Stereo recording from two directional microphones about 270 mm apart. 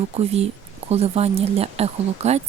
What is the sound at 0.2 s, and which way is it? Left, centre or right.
Speech, right.